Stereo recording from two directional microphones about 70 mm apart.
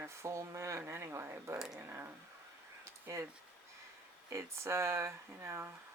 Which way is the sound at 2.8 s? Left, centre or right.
Right.